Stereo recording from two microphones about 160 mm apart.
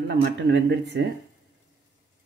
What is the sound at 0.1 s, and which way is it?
Speech, 90° right.